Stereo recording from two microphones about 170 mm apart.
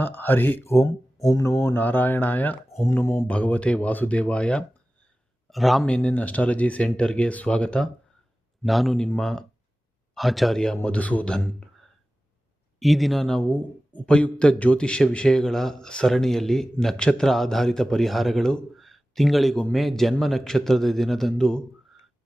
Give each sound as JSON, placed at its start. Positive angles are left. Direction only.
{"t": 0.0, "sound": "a man's voice", "side_deg": 10}